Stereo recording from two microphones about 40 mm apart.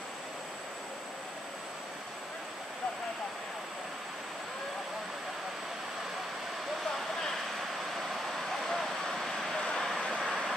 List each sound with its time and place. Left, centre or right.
8.6 s vehicle: centre
9.6 s vehicle: centre
9.8 s vehicle: centre